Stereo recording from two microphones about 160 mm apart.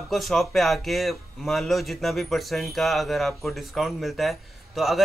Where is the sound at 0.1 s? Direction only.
Centre (ahead or behind).